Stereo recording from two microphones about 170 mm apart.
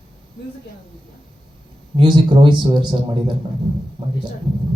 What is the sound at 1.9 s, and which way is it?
Speech, 25° right (ahead or behind).